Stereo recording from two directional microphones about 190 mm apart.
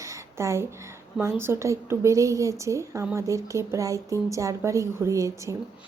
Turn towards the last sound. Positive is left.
turn(degrees=-15)  # may be behind; listen again after turning